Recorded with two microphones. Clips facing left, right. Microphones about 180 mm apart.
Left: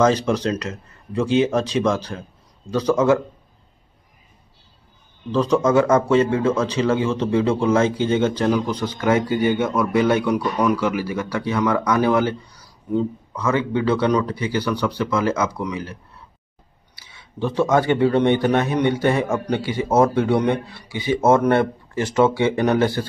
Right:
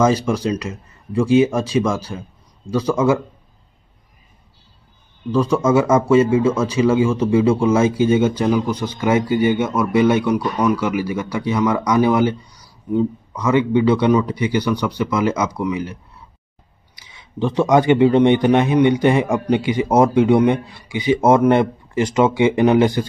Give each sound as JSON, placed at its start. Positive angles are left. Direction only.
{"t": 0.0, "sound": "speech", "side_deg": -5}
{"t": 5.6, "sound": "a man's voice", "side_deg": -5}
{"t": 10.3, "sound": "a man's voice", "side_deg": 0}